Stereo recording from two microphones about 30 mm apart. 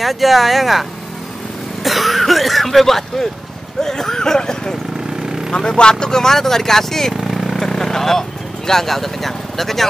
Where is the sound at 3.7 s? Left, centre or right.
Centre.